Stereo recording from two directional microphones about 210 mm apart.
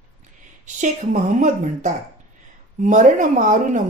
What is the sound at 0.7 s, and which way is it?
Speech, 35° right (ahead or behind).